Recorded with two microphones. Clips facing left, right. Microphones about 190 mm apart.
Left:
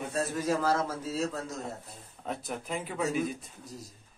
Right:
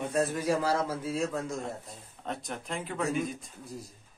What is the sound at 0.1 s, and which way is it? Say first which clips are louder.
A man's voice: right 1 dB; 15° right (ahead or behind).